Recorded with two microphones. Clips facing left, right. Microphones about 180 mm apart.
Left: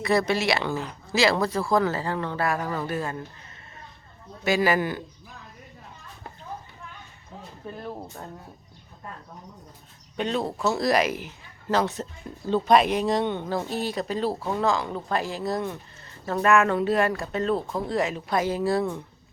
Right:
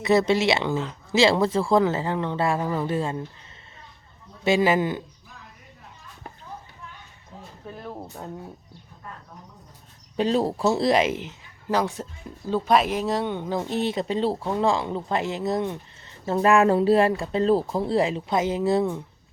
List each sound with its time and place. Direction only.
0.0 s speech: 25° right (ahead or behind)
4.4 s speech: 25° right (ahead or behind)
7.7 s speech: 10° right (ahead or behind)
10.2 s speech: 35° right (ahead or behind)
11.7 s speech: 10° right (ahead or behind)
13.5 s speech: 20° right (ahead or behind)